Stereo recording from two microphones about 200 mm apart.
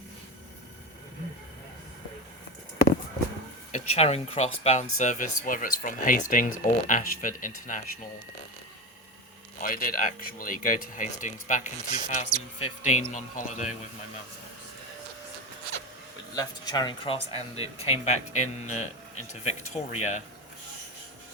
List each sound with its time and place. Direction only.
3.7 s speech: 35° left (ahead or behind)
9.6 s speech: 45° left (ahead or behind)
16.3 s speech: 20° left (ahead or behind); by 20.2 s 35° left (ahead or behind)